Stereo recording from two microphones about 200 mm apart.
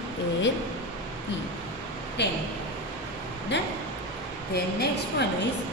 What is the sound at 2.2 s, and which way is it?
Speech, 60° left (ahead or behind).